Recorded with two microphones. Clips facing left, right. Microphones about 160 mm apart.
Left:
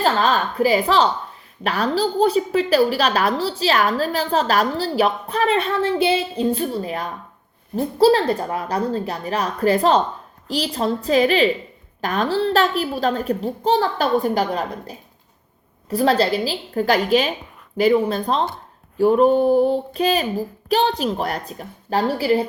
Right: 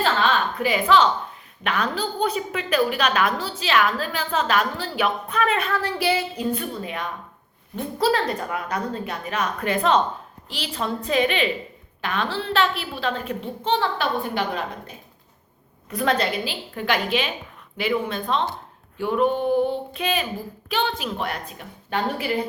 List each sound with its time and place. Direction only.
0.0 s a woman's voice: 40° left (ahead or behind)